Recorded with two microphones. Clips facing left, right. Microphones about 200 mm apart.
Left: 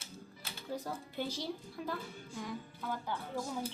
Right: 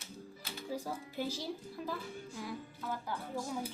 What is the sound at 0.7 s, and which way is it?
Speech, 5° right (ahead or behind).